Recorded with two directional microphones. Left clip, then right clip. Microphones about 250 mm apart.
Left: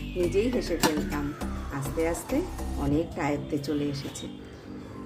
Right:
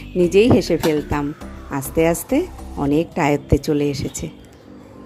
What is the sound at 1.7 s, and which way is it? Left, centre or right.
A woman's voice, right.